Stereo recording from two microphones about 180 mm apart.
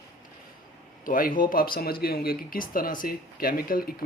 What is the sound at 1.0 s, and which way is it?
Speech, 50° left (ahead or behind).